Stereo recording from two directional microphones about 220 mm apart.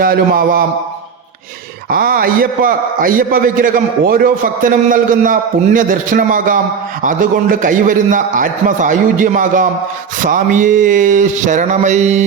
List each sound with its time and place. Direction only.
0.0 s a man's voice: 40° right (ahead or behind)
1.9 s a man's voice: 40° right (ahead or behind)